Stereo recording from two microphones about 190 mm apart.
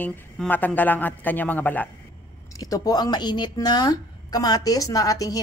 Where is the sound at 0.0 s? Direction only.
10° left (ahead or behind).